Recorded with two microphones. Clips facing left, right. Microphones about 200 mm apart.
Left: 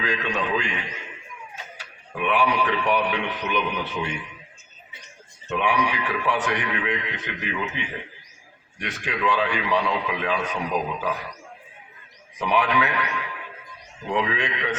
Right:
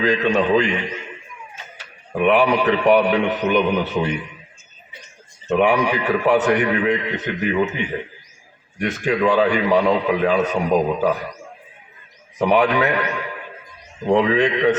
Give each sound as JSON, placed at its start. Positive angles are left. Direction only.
{"t": 0.0, "sound": "speech", "side_deg": -40}
{"t": 2.1, "sound": "speech", "side_deg": -40}
{"t": 5.5, "sound": "speech", "side_deg": -40}
{"t": 12.4, "sound": "a man's voice", "side_deg": -45}